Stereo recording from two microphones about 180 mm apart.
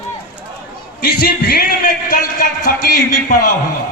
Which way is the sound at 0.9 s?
60° left (ahead or behind).